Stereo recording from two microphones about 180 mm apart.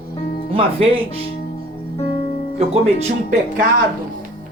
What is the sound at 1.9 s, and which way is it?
Music, 35° left (ahead or behind).